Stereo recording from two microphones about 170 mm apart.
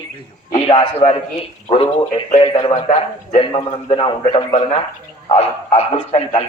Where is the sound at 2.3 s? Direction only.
35° left (ahead or behind).